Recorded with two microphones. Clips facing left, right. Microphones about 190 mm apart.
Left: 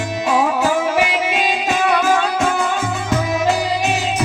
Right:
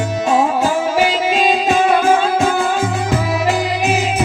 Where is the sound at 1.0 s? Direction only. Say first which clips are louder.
Right 3 dB; 30° right (ahead or behind).